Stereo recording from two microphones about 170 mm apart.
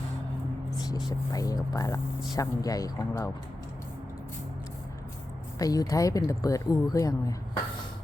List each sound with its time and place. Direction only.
0.7 s speech: 20° left (ahead or behind)
5.5 s speech: 20° left (ahead or behind)